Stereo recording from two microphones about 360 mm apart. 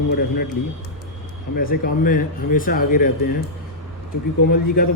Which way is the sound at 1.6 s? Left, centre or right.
Left.